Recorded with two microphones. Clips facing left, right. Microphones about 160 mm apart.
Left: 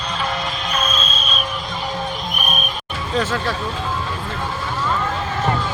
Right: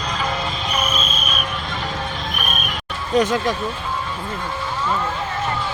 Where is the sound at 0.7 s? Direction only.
15° right (ahead or behind).